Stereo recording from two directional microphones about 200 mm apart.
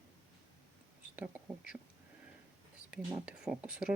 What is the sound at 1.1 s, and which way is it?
Speech, 5° right (ahead or behind).